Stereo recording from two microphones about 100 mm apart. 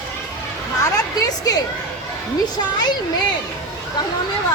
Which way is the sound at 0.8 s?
40° left (ahead or behind).